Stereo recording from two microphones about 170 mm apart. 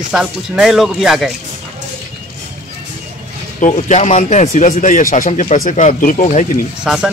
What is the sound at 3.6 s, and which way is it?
Speech, 40° left (ahead or behind).